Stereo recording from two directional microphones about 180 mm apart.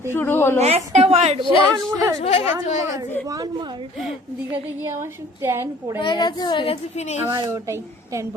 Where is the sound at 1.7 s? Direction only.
20° right (ahead or behind).